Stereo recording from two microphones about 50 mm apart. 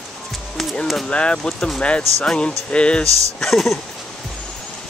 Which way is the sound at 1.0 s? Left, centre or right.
Centre.